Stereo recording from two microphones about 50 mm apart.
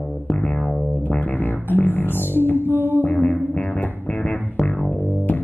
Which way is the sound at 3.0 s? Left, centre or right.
Left.